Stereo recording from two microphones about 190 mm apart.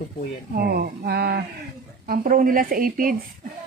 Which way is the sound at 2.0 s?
45° right (ahead or behind).